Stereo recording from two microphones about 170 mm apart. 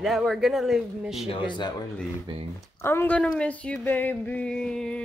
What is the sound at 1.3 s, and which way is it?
Speech, 25° left (ahead or behind).